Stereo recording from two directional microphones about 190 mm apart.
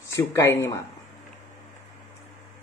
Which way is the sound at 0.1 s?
15° left (ahead or behind).